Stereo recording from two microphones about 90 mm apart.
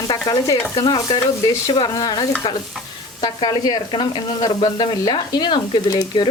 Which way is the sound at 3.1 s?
55° left (ahead or behind).